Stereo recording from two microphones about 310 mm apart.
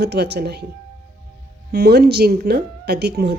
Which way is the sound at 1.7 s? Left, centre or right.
Right.